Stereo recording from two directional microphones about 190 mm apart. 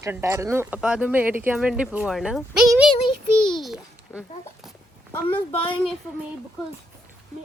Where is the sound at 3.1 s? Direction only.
25° left (ahead or behind).